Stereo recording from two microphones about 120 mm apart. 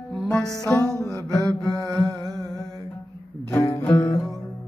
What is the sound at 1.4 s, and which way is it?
Mantra, 30° right (ahead or behind).